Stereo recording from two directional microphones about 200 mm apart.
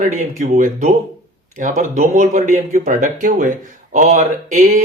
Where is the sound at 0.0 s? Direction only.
40° right (ahead or behind).